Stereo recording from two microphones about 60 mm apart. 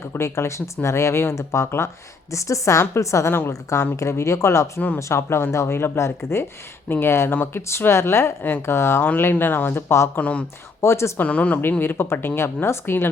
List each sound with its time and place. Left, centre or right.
0.1 s speech: left
10.2 s speech: left
10.8 s speech: left
11.2 s speech: left
11.8 s speech: left